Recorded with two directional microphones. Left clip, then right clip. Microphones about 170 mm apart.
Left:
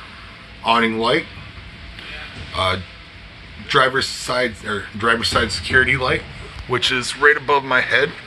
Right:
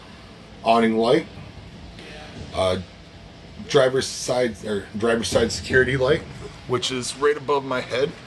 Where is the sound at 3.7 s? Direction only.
25° right (ahead or behind).